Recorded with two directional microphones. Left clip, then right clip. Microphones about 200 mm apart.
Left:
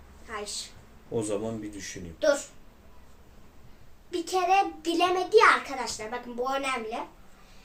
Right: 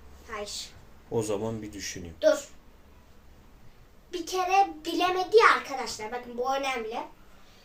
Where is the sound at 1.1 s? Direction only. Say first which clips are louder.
Right 1 dB; 30° right (ahead or behind).